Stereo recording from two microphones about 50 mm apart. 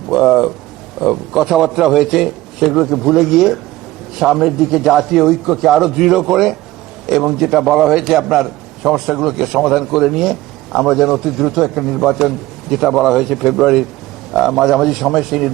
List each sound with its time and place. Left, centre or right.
0.1 s a man's voice: centre